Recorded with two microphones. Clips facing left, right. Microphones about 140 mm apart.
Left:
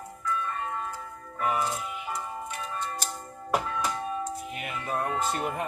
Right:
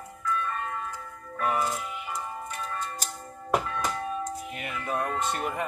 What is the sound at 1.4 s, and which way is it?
Speech, centre (ahead or behind).